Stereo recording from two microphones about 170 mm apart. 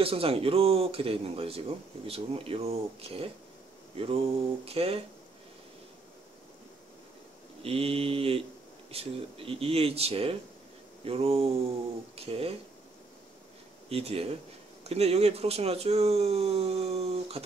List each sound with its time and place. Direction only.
0.0 s speech: 35° right (ahead or behind)
3.9 s a sound: 35° right (ahead or behind)
4.6 s speech: 35° right (ahead or behind)
7.6 s speech: 35° right (ahead or behind)
13.8 s speech: 35° right (ahead or behind)